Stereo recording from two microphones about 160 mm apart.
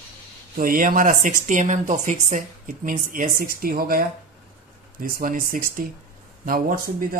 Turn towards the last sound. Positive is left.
turn(degrees=-65)  # may be behind; listen again after turning